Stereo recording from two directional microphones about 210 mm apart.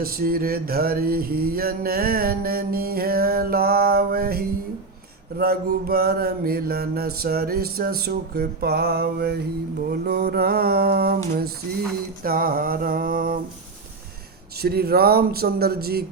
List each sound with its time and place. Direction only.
0.0 s mantra: 45° right (ahead or behind)
12.2 s mantra: 45° right (ahead or behind)
14.6 s mantra: 50° right (ahead or behind)